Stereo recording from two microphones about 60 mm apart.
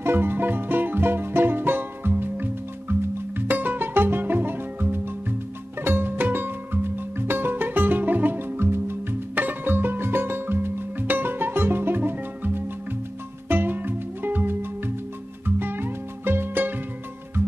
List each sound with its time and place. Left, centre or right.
0.0 s music: right